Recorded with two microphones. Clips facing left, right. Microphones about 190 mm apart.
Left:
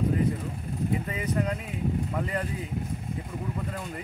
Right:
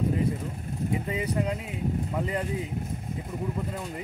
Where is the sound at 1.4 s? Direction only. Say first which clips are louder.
Left 1 dB; 20° right (ahead or behind).